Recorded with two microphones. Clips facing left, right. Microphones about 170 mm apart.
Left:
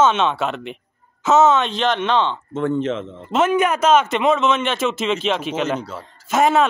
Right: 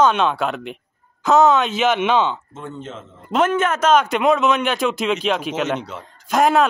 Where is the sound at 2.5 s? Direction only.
85° left.